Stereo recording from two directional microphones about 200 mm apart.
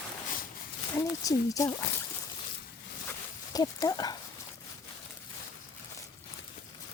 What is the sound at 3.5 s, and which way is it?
Speech, 20° left (ahead or behind).